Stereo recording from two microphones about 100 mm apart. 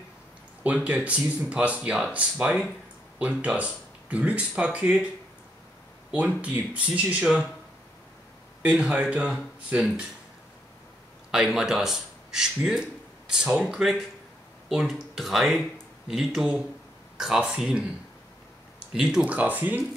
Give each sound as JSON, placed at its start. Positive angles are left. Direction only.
{"t": 0.8, "sound": "speech", "side_deg": -10}
{"t": 6.1, "sound": "speech", "side_deg": -15}
{"t": 8.6, "sound": "speech", "side_deg": -10}
{"t": 11.3, "sound": "speech", "side_deg": -5}
{"t": 18.9, "sound": "speech", "side_deg": -5}